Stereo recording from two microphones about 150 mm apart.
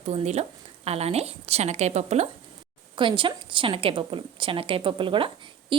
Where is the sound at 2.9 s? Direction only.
35° right (ahead or behind).